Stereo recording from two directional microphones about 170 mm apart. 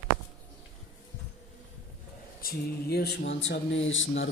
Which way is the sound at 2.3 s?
65° left (ahead or behind).